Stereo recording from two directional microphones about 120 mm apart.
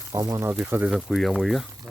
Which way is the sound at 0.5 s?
10° right (ahead or behind).